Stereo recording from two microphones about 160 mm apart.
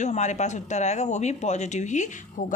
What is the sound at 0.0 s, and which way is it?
A woman's voice, 45° left (ahead or behind).